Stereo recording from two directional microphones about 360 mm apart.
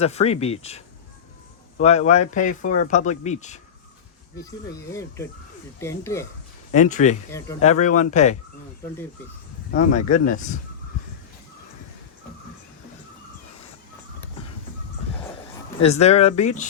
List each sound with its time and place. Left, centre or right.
0.0 s speech: centre
1.8 s speech: centre
6.7 s speech: centre
7.3 s speech: centre
9.7 s speech: left
15.8 s speech: centre